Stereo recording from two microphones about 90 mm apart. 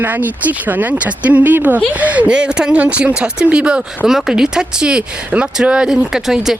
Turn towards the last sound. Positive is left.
turn(degrees=-5)  # may be behind; listen again after turning